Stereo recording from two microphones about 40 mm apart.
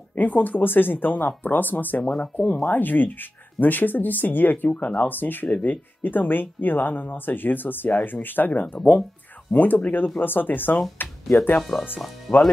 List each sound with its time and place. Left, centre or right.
0.1 s speech: left
2.0 s speech: centre
2.3 s speech: left
11.0 s music: left
11.7 s speech: centre